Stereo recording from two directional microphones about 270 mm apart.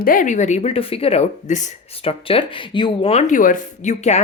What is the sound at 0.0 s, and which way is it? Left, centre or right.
Speech, left.